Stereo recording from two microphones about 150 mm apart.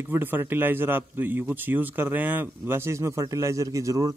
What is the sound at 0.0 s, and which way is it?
A man's voice, 15° right (ahead or behind).